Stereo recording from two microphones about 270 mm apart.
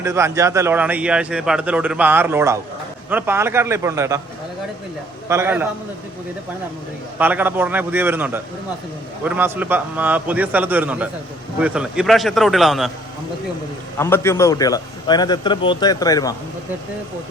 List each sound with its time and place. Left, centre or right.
0.0 s a man's voice: centre
5.3 s a man's voice: centre
7.2 s a man's voice: centre
14.0 s a man's voice: centre